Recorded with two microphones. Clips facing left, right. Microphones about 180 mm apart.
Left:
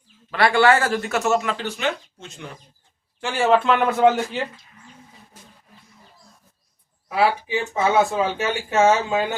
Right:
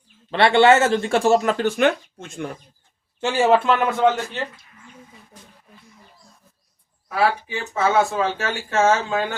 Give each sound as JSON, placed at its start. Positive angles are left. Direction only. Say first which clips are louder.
{"t": 0.3, "sound": "speech", "louder": "right 3 dB", "side_deg": -25}
{"t": 3.2, "sound": "speech", "louder": "right 3 dB", "side_deg": -20}
{"t": 3.5, "sound": "a man's voice", "louder": "left 3 dB", "side_deg": -5}
{"t": 7.2, "sound": "speech", "louder": "left 1 dB", "side_deg": 15}